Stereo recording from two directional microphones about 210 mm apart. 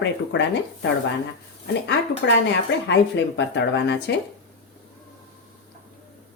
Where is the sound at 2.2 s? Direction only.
60° left (ahead or behind).